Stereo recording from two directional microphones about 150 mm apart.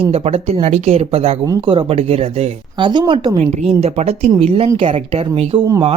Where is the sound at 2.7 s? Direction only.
30° right (ahead or behind).